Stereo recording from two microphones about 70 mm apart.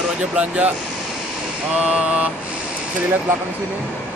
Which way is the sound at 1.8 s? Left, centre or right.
Centre.